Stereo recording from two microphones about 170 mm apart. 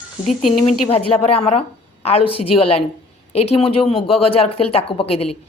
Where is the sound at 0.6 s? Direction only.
35° left (ahead or behind).